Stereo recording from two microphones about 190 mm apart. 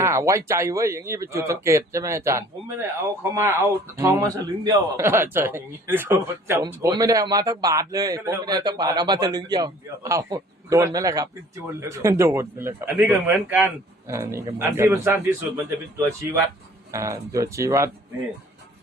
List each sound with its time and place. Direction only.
0.0 s speech: 15° right (ahead or behind)